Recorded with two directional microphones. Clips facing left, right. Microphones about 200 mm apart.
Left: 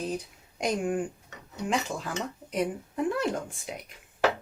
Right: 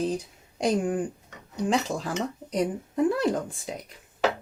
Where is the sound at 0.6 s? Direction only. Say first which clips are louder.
Right 3 dB; 35° right (ahead or behind).